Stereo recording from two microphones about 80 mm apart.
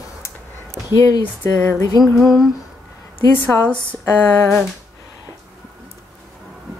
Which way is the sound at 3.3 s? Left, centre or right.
Left.